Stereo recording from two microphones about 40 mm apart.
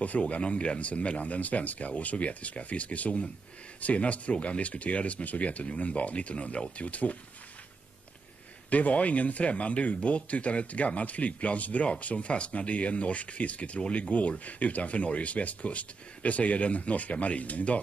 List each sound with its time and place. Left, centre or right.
0.0 s speech: left
8.6 s speech: left